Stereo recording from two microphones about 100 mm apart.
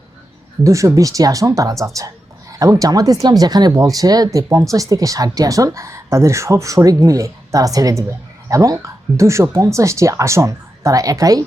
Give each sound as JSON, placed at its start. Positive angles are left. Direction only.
{"t": 0.6, "sound": "speech", "side_deg": -30}